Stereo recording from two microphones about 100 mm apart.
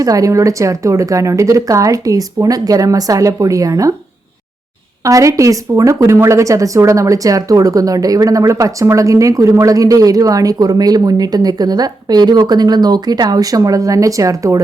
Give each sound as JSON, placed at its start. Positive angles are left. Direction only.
{"t": 0.0, "sound": "a woman's voice", "side_deg": -35}
{"t": 5.0, "sound": "a woman's voice", "side_deg": -35}